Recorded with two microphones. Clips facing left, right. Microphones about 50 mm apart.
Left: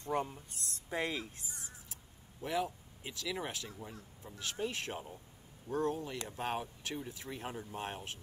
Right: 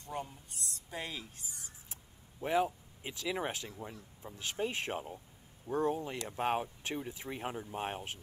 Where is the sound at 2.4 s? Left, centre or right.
Right.